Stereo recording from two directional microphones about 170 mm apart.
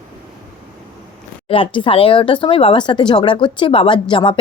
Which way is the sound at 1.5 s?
30° left (ahead or behind).